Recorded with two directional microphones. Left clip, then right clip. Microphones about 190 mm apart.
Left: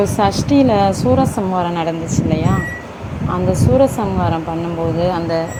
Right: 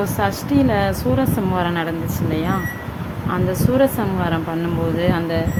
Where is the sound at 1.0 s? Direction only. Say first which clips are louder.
Left 5 dB; 5° left (ahead or behind).